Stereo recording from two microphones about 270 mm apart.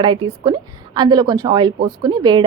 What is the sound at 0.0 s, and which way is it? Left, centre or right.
A woman's voice, centre.